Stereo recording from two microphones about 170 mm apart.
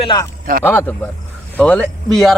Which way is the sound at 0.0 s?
25° left (ahead or behind).